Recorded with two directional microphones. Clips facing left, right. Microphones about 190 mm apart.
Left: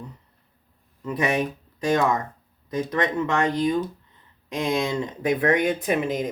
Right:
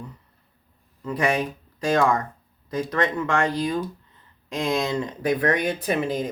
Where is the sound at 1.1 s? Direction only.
20° left (ahead or behind).